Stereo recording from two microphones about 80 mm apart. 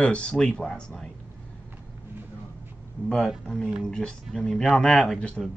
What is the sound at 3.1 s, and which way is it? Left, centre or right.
Speech, centre.